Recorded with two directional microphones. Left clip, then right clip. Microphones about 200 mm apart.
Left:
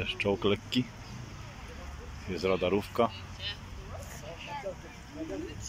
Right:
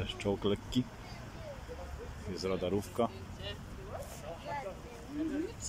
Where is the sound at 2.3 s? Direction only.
5° right (ahead or behind).